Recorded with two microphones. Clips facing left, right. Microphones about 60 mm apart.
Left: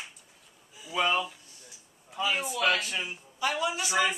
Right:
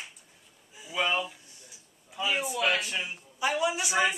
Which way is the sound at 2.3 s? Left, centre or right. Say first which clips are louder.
Even; centre.